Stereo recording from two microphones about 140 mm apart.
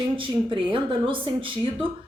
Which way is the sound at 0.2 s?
35° right (ahead or behind).